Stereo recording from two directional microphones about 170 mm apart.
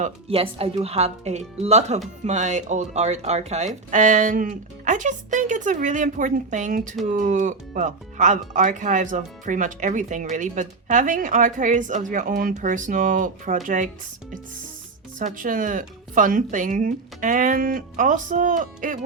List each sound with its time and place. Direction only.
0.0 s speech: 35° right (ahead or behind)
15.2 s speech: 50° right (ahead or behind)